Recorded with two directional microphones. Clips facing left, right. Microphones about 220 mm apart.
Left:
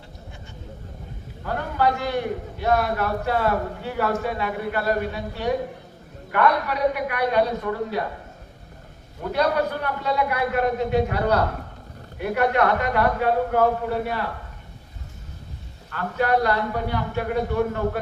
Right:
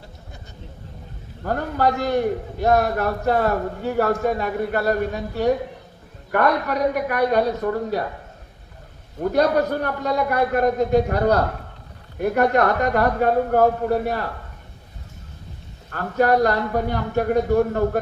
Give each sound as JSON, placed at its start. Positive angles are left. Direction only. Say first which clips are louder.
{"t": 1.5, "sound": "a man's voice", "louder": "right 2 dB", "side_deg": -45}
{"t": 9.3, "sound": "a man's voice", "louder": "right 3 dB", "side_deg": -45}
{"t": 15.9, "sound": "a man's voice", "louder": "right 4 dB", "side_deg": -45}